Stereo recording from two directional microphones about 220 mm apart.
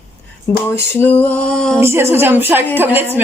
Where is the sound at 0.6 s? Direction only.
10° left (ahead or behind).